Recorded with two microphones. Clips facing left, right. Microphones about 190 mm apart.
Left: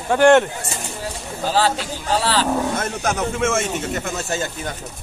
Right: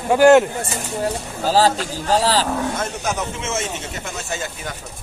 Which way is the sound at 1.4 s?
40° right (ahead or behind).